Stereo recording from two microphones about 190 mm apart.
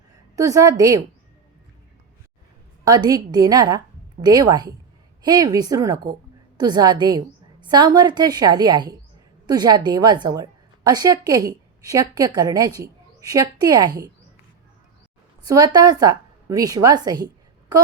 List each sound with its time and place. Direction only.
0.3 s a woman's voice: 15° right (ahead or behind)
2.8 s a woman's voice: 20° right (ahead or behind)
15.4 s a woman's voice: 20° right (ahead or behind)